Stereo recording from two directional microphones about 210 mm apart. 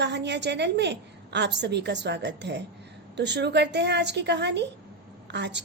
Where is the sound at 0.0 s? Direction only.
55° right (ahead or behind).